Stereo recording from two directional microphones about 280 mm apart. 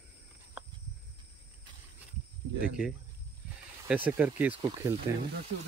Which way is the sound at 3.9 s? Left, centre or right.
Centre.